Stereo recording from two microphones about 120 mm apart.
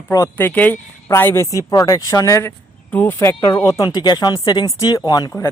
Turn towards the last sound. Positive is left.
turn(degrees=35)  # may be behind; listen again after turning